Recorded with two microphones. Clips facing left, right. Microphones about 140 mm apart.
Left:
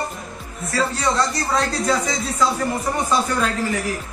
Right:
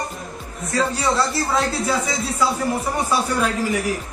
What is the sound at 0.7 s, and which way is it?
Speech, 20° right (ahead or behind).